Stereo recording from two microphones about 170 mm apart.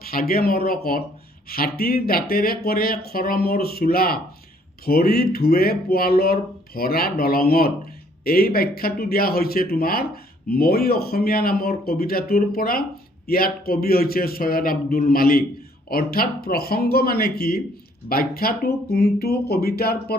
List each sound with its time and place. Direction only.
0.0 s speech: 60° left (ahead or behind)